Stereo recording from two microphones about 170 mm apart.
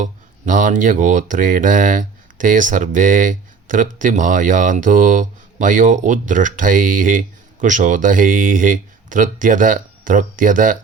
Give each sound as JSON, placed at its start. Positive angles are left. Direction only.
{"t": 0.0, "sound": "speech", "side_deg": -50}